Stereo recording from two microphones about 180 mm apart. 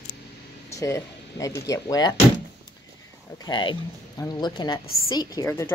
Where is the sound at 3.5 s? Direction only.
25° left (ahead or behind).